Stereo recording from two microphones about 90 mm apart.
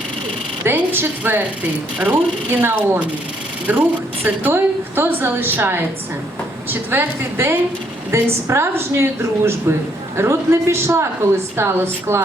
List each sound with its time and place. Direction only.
0.6 s a woman's voice: 25° right (ahead or behind)